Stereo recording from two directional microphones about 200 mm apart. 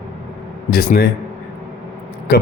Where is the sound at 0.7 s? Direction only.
50° left (ahead or behind).